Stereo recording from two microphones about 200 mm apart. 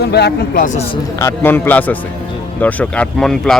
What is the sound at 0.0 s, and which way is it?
Speech, 55° left (ahead or behind).